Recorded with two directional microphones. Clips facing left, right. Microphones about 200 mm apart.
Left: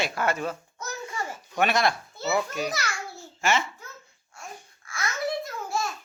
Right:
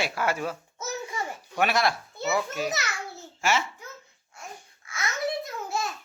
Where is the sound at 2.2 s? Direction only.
Centre (ahead or behind).